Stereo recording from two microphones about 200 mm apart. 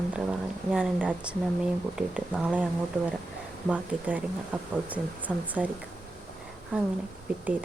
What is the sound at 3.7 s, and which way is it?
Speech, 5° right (ahead or behind).